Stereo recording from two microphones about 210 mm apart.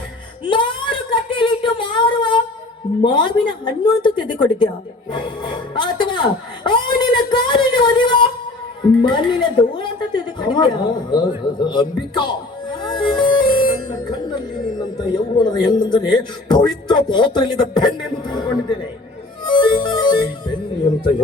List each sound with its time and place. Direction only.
0.4 s a sound: 25° left (ahead or behind)
3.0 s speech: 20° left (ahead or behind)
6.7 s a sound: 20° left (ahead or behind)
8.8 s a woman's voice: 20° left (ahead or behind)
12.8 s music: 20° left (ahead or behind)
14.8 s speech: 20° left (ahead or behind)
19.5 s music: 20° left (ahead or behind)